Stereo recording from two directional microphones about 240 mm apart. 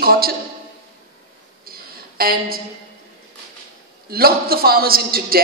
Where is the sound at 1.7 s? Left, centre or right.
Right.